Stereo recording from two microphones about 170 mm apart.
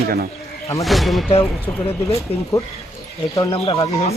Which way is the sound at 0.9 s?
Centre (ahead or behind).